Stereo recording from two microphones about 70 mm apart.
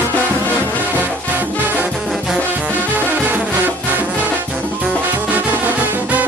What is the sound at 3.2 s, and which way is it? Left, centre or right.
Music, right.